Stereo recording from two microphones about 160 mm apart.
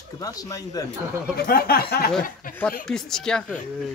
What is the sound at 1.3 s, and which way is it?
Speech, 75° left (ahead or behind).